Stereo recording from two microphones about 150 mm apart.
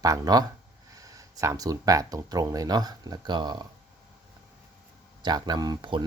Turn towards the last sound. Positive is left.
turn(degrees=-30)  # may be behind; listen again after turning